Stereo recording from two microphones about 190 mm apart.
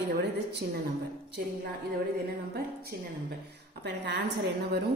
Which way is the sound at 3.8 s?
65° right (ahead or behind).